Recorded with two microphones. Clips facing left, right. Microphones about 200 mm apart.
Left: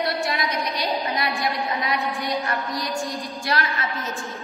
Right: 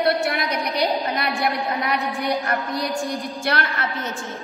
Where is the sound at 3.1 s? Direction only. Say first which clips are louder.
Right 3 dB; 15° right (ahead or behind).